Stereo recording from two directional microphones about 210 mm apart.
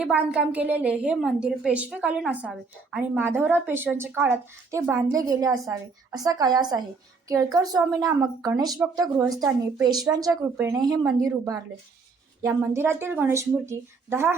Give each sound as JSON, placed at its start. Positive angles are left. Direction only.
{"t": 0.0, "sound": "a woman's voice", "side_deg": -5}